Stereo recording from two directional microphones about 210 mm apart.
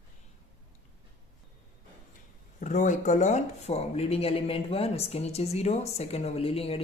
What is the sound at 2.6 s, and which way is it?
Speech, 35° left (ahead or behind).